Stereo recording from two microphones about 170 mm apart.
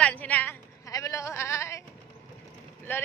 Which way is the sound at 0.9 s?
20° left (ahead or behind).